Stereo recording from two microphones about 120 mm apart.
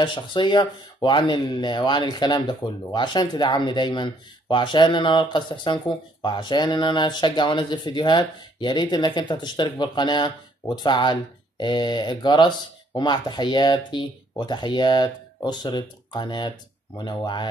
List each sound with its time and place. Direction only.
0.0 s speech: 40° left (ahead or behind)